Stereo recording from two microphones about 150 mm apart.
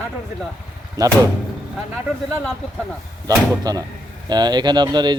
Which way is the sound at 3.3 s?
25° right (ahead or behind).